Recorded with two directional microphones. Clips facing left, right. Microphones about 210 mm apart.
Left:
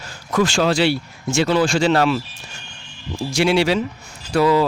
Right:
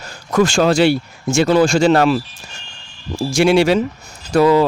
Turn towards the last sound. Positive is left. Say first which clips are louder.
# right 4 dB
turn(degrees=-45)  # may be behind; listen again after turning